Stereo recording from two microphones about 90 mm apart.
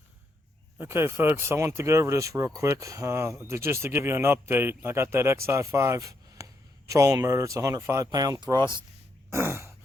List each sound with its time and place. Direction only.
0.8 s speech: 25° right (ahead or behind); by 8.6 s 45° right (ahead or behind)
9.3 s throat clearing: 30° right (ahead or behind)